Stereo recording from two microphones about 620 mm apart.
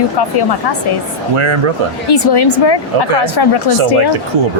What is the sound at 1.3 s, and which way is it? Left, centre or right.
Speech, right.